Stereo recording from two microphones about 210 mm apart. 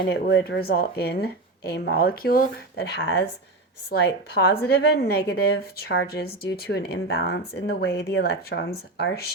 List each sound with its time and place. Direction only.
0.1 s a woman's voice: 55° left (ahead or behind)